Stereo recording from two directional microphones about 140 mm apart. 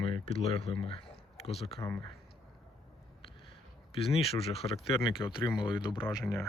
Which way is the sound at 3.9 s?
45° left (ahead or behind).